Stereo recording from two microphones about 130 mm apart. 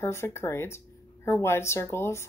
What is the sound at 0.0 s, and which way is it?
Speech, 20° left (ahead or behind).